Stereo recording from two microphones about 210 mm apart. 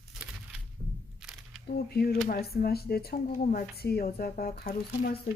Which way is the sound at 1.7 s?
50° left (ahead or behind).